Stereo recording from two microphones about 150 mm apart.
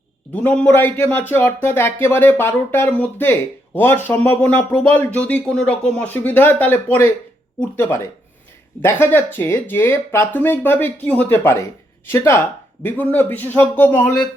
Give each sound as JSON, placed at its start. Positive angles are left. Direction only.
{"t": 0.3, "sound": "speech", "side_deg": 10}